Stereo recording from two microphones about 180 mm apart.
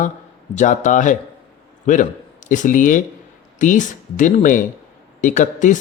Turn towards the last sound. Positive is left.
turn(degrees=45)  # may be behind; listen again after turning